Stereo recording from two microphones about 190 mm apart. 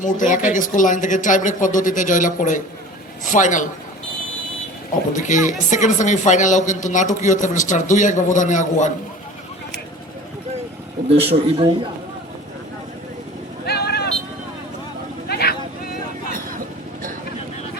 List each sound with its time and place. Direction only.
0.0 s a man's voice: 40° left (ahead or behind)
5.1 s speech: 40° left (ahead or behind)
11.2 s a man's voice: 30° right (ahead or behind)
13.7 s vehicle: 60° left (ahead or behind)
15.3 s a sound: 55° left (ahead or behind)